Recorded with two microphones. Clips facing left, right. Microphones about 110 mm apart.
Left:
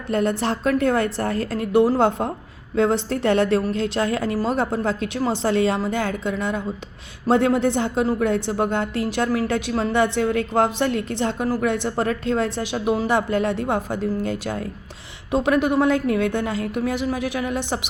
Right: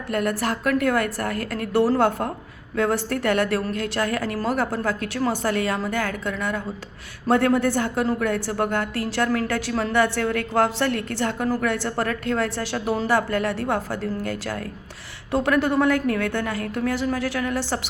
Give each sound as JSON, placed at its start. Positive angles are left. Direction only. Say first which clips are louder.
{"t": 0.1, "sound": "a woman's voice", "louder": "left 3 dB", "side_deg": 25}